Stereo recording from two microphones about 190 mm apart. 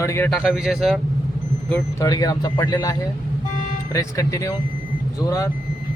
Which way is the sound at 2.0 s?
20° left (ahead or behind).